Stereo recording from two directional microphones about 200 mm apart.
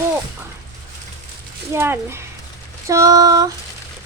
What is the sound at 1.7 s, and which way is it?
Speech, 10° right (ahead or behind).